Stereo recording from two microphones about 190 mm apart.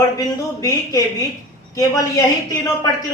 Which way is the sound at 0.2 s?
20° left (ahead or behind).